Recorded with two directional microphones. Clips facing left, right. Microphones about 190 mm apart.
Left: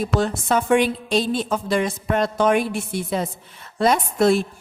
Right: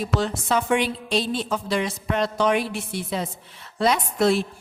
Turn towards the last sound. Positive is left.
turn(degrees=45)  # may be behind; listen again after turning